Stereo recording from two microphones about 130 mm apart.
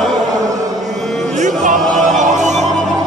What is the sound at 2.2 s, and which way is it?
Music, 65° right (ahead or behind).